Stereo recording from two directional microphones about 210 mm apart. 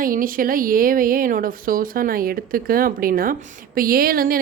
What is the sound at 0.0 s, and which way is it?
A woman's voice, 40° right (ahead or behind).